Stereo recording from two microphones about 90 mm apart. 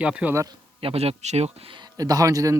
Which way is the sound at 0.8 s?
90° right.